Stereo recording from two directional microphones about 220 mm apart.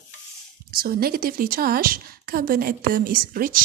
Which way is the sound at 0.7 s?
40° right (ahead or behind).